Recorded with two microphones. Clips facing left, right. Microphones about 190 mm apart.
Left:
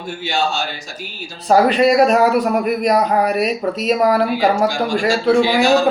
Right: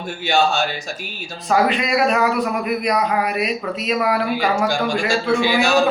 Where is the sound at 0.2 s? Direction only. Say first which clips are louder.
Right 3 dB; 55° right (ahead or behind).